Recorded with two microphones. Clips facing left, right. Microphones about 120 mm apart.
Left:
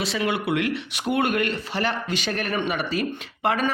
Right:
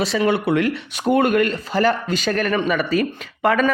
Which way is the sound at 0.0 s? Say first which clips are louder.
Right 6 dB; 40° right (ahead or behind).